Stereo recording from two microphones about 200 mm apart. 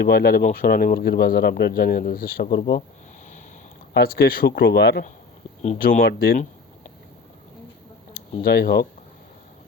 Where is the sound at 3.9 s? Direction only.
50° left (ahead or behind).